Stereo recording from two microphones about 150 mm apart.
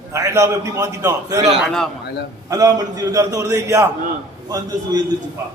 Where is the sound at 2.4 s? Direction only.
25° right (ahead or behind).